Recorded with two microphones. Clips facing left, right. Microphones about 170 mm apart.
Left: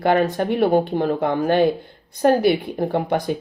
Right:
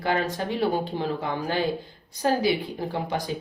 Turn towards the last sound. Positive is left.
turn(degrees=55)  # may be behind; listen again after turning